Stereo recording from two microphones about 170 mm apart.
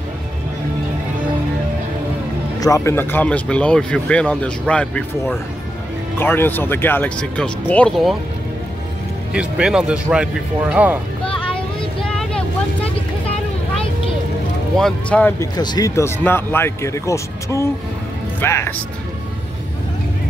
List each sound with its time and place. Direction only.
2.6 s speech: 15° left (ahead or behind); by 8.2 s centre (ahead or behind)
9.3 s speech: 5° right (ahead or behind)
11.4 s vehicle: 5° left (ahead or behind)
14.8 s speech: 5° left (ahead or behind)
15.5 s speech: 25° left (ahead or behind)